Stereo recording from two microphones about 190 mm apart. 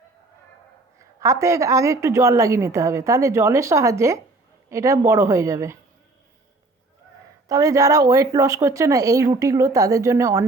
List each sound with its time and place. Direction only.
1.2 s a woman's voice: 15° right (ahead or behind)
7.4 s a woman's voice: 20° right (ahead or behind)